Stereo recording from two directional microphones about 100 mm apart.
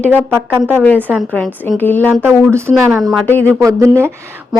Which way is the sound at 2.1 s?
20° right (ahead or behind).